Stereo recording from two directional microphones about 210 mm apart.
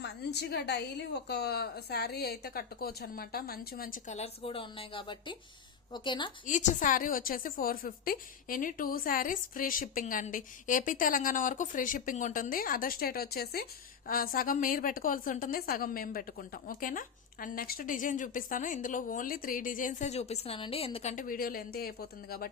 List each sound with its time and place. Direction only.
0.0 s a woman's voice: 50° left (ahead or behind); by 6.3 s 20° left (ahead or behind)
6.4 s a woman's voice: 35° left (ahead or behind)